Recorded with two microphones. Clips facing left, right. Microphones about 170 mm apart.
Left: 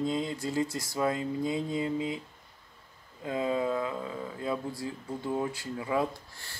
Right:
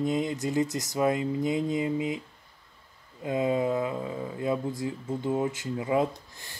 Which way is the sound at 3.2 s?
20° right (ahead or behind).